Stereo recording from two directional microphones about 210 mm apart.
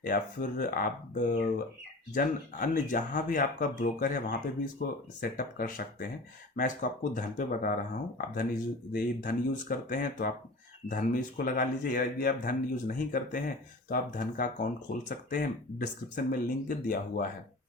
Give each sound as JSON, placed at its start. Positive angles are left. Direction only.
{"t": 0.0, "sound": "speech", "side_deg": 40}
{"t": 8.9, "sound": "speech", "side_deg": 40}